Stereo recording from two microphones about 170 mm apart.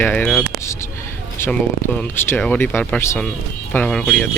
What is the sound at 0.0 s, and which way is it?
Speech, 10° left (ahead or behind).